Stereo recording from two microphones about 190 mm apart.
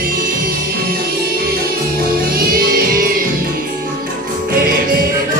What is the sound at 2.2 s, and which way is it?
Music, 50° right (ahead or behind).